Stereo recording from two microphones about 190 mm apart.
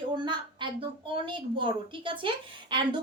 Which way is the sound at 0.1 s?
25° right (ahead or behind).